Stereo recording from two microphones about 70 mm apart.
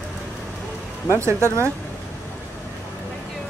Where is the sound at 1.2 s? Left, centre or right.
Right.